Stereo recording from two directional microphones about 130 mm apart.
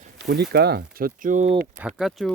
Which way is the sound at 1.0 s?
90° right.